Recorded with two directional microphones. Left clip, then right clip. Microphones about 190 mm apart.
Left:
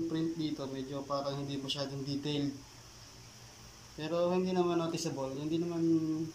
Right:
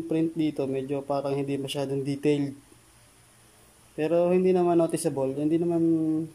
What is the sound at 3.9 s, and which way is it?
Speech, 45° right (ahead or behind).